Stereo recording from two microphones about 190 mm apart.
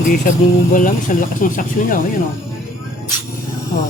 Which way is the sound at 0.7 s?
45° left (ahead or behind).